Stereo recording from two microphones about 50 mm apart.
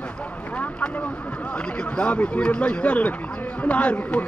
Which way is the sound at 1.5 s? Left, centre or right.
Centre.